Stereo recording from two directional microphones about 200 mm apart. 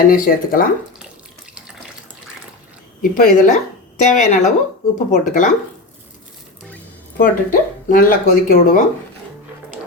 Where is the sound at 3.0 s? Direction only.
40° left (ahead or behind).